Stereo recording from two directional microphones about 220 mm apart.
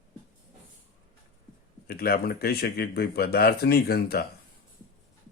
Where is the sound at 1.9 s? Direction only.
45° left (ahead or behind).